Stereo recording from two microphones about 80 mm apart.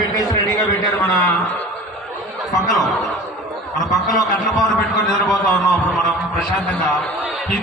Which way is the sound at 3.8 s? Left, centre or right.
Centre.